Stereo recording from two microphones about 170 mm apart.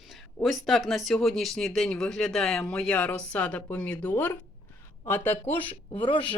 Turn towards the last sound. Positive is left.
turn(degrees=30)  # may be behind; listen again after turning